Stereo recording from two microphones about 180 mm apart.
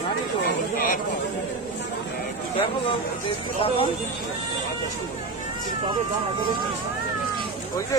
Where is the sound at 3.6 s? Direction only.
30° left (ahead or behind).